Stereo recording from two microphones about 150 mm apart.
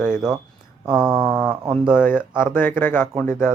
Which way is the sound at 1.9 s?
15° left (ahead or behind).